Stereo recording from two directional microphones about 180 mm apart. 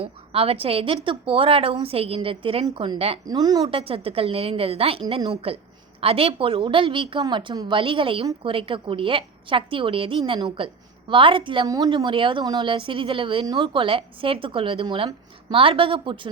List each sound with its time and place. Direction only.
0.0 s a woman's voice: 30° right (ahead or behind)
3.8 s a woman's voice: 30° right (ahead or behind)